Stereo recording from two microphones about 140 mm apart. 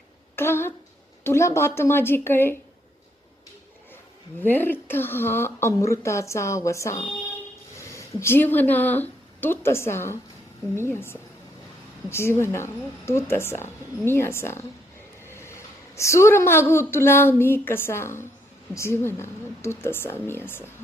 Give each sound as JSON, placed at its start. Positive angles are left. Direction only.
{"t": 0.3, "sound": "a woman's voice", "side_deg": 15}
{"t": 4.4, "sound": "a woman's voice", "side_deg": 15}